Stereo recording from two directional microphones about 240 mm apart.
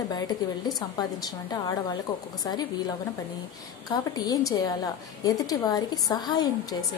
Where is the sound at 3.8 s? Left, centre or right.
Centre.